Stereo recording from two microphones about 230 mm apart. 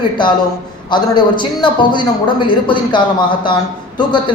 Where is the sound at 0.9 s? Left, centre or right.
Centre.